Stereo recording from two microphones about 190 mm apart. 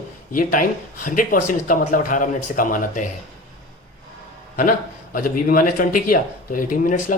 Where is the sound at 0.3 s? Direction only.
45° left (ahead or behind).